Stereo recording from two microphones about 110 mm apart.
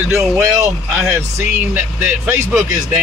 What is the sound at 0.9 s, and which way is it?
Speech, 15° right (ahead or behind).